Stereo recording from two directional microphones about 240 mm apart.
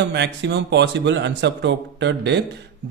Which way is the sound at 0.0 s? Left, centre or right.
Right.